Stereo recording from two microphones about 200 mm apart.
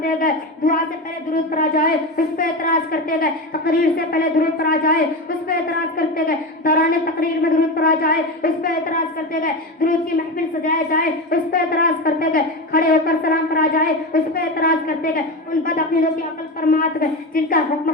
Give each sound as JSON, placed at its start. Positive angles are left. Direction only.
{"t": 0.0, "sound": "a woman's voice", "side_deg": 45}
{"t": 6.0, "sound": "a woman's voice", "side_deg": 45}